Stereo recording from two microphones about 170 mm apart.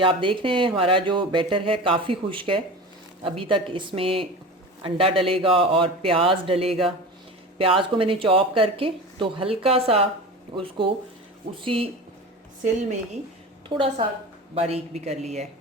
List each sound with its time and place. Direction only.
0.0 s speech: 30° right (ahead or behind)
13.7 s speech: 30° right (ahead or behind)